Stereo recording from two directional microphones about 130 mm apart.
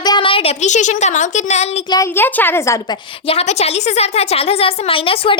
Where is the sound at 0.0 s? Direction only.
35° left (ahead or behind).